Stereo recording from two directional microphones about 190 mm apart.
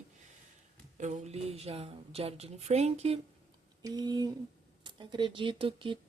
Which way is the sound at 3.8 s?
20° right (ahead or behind).